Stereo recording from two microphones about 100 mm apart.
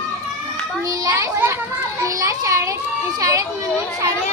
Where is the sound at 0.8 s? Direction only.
35° right (ahead or behind).